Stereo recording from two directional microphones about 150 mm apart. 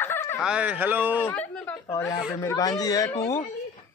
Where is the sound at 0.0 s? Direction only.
15° left (ahead or behind).